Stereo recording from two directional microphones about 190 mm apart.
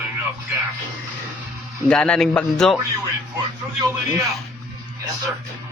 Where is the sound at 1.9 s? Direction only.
5° left (ahead or behind).